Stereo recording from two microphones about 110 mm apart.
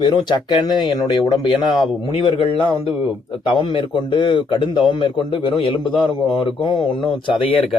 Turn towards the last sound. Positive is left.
turn(degrees=55)  # may be behind; listen again after turning